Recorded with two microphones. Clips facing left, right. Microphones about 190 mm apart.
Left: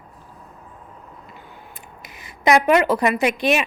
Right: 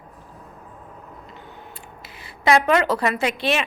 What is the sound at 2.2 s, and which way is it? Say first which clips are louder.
Speech: left 2 dB; 15° left (ahead or behind).